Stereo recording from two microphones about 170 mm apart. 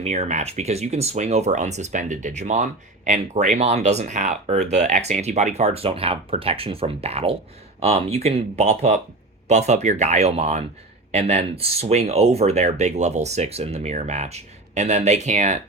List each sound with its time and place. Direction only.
0.0 s speech: 40° right (ahead or behind)